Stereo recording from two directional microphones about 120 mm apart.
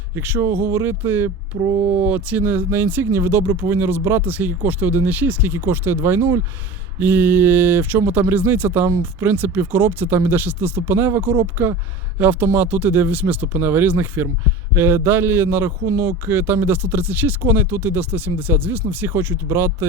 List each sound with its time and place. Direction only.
0.2 s a man's voice: 20° right (ahead or behind)